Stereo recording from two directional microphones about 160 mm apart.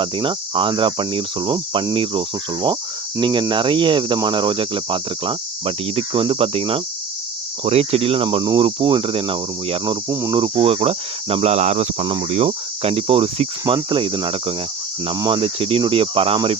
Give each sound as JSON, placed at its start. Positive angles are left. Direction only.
{"t": 0.0, "sound": "speech", "side_deg": -30}
{"t": 3.2, "sound": "cricket", "side_deg": -30}
{"t": 3.5, "sound": "speech", "side_deg": -30}
{"t": 10.1, "sound": "speech", "side_deg": -20}
{"t": 10.3, "sound": "speech", "side_deg": -30}